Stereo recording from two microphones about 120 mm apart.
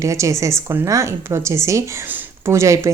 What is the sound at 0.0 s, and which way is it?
Speech, 25° right (ahead or behind).